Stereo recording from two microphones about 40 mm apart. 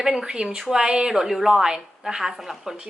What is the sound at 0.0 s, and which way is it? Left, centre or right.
A woman's voice, centre.